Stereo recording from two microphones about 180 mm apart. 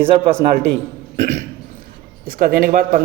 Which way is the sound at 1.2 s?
40° right (ahead or behind).